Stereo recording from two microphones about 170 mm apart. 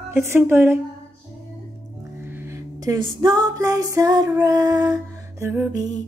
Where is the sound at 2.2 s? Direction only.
15° right (ahead or behind).